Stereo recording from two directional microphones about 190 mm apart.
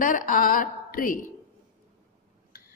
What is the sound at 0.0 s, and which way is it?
A woman's voice, 45° left (ahead or behind).